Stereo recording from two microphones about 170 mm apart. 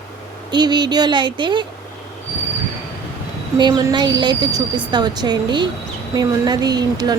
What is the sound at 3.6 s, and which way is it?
A woman's voice, 25° right (ahead or behind).